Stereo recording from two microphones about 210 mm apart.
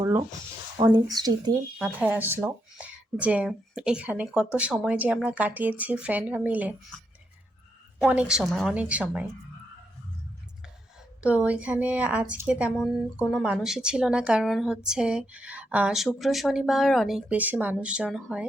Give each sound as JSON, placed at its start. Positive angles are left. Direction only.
{"t": 0.0, "sound": "speech", "side_deg": -15}
{"t": 1.8, "sound": "speech", "side_deg": -5}
{"t": 7.9, "sound": "a woman's voice", "side_deg": -5}
{"t": 11.2, "sound": "a woman's voice", "side_deg": -5}